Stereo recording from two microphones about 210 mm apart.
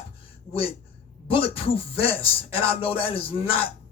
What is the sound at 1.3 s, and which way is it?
Speech, 25° left (ahead or behind).